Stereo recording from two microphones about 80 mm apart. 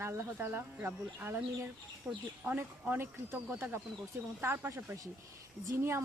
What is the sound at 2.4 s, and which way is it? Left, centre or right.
A woman's voice, right.